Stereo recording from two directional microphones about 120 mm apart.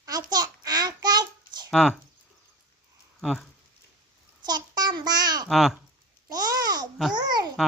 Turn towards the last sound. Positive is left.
turn(degrees=-35)  # may be behind; listen again after turning